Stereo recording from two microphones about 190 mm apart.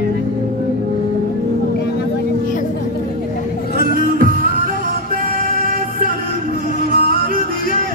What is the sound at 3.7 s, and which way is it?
Music, 50° right (ahead or behind).